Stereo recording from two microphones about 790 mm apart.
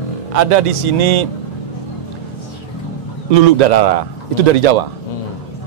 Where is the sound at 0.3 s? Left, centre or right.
Right.